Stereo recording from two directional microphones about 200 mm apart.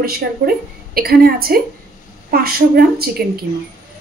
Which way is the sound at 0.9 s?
50° right (ahead or behind).